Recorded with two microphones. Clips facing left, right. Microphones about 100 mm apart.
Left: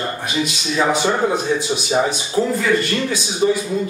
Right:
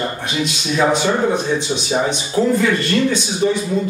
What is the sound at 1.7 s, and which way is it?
Speech, 10° left (ahead or behind).